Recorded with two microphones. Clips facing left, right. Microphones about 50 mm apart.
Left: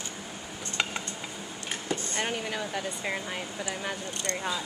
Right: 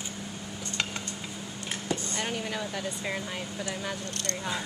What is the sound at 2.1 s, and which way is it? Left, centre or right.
Speech, centre.